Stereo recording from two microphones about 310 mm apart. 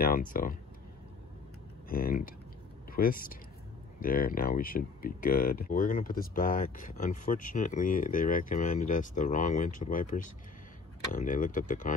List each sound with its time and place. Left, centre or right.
0.0 s speech: left
1.9 s speech: left